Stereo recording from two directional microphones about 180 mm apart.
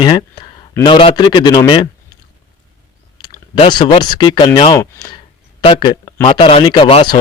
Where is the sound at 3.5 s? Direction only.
25° left (ahead or behind).